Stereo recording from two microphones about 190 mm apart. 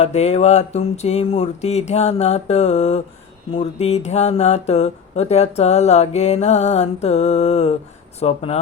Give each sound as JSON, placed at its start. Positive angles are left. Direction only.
{"t": 0.0, "sound": "speech", "side_deg": 35}